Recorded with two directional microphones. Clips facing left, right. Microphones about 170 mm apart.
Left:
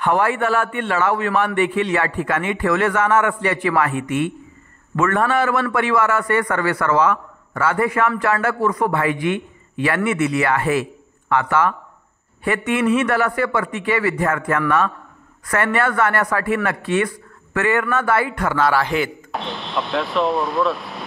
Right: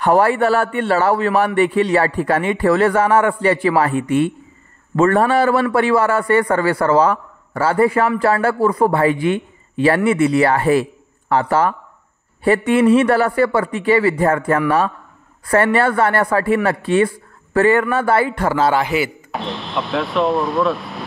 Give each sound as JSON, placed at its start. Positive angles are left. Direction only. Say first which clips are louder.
{"t": 0.0, "sound": "a man's voice", "louder": "right 4 dB", "side_deg": -35}
{"t": 18.9, "sound": "speech", "louder": "right 2 dB", "side_deg": -5}